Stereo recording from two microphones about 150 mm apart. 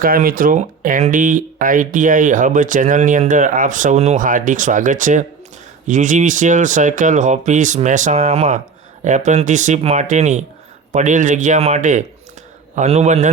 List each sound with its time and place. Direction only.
0.0 s speech: 70° right (ahead or behind); by 13.2 s 45° right (ahead or behind)